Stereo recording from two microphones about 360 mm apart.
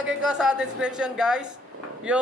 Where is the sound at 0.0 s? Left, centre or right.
Centre.